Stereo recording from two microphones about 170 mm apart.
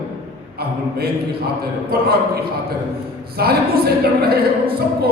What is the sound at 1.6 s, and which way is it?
A woman's voice, 65° right (ahead or behind).